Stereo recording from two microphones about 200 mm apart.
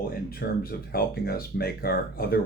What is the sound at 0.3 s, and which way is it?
Speech, 50° left (ahead or behind).